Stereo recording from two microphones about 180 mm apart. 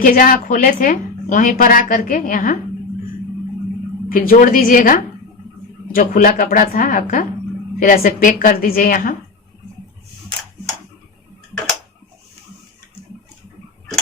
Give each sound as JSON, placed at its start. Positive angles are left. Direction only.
{"t": 0.0, "sound": "a woman's voice", "side_deg": 50}
{"t": 4.1, "sound": "a woman's voice", "side_deg": 50}